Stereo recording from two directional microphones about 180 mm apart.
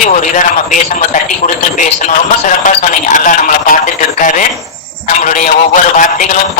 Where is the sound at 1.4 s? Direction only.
45° left (ahead or behind).